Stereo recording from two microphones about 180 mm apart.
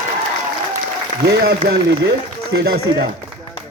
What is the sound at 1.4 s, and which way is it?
Speech, 65° right (ahead or behind).